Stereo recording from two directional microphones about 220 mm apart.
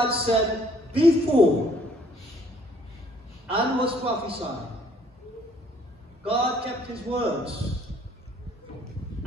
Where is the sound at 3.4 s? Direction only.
25° right (ahead or behind).